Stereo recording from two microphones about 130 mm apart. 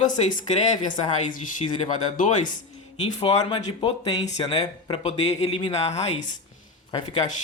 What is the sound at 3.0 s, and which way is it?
Speech, 55° left (ahead or behind).